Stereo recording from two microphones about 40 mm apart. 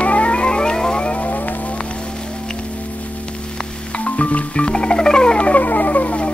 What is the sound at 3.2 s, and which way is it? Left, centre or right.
Music, left.